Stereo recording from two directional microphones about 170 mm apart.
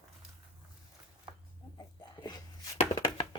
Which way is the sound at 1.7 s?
25° left (ahead or behind).